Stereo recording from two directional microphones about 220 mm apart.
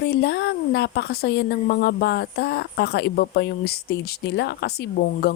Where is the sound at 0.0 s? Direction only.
50° left (ahead or behind).